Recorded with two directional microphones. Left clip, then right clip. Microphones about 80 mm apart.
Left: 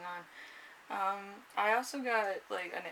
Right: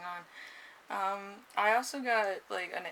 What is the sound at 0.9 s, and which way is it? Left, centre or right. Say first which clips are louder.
Speech: right 1 dB; right.